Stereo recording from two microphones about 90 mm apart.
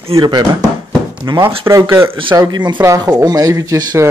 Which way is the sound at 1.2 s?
40° right (ahead or behind).